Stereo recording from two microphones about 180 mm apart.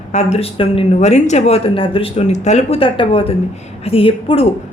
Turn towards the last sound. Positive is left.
turn(degrees=30)  # may be behind; listen again after turning